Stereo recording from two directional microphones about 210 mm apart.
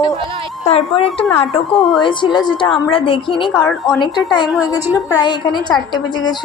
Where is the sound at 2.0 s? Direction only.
20° left (ahead or behind).